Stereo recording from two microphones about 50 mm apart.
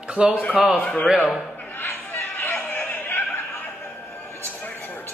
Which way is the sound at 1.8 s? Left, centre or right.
Left.